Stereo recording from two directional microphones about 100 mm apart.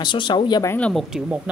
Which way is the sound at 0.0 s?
50° left (ahead or behind).